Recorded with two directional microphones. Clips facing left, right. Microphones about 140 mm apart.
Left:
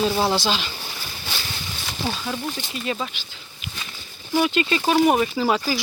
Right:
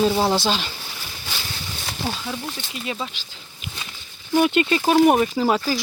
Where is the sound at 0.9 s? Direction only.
10° left (ahead or behind).